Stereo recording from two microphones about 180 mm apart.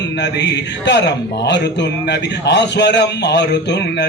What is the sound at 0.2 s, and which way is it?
Speech, 70° left (ahead or behind).